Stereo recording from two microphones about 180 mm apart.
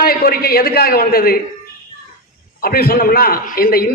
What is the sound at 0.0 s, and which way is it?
A man's voice, 55° left (ahead or behind).